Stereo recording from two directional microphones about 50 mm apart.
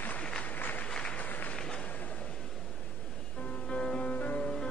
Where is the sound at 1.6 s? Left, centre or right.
Centre.